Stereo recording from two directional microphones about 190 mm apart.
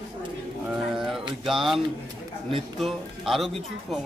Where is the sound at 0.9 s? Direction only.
Centre (ahead or behind).